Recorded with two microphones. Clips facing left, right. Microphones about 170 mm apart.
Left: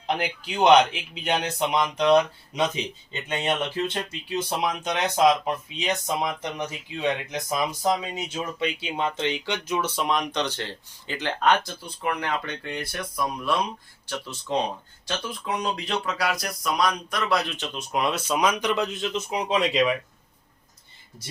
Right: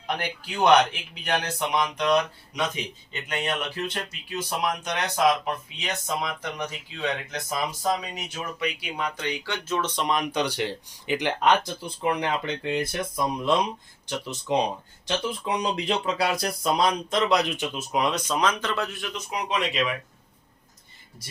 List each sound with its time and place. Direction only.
0.1 s speech: 20° left (ahead or behind); by 17.7 s 15° right (ahead or behind)
17.7 s speech: centre (ahead or behind); by 19.8 s 30° left (ahead or behind)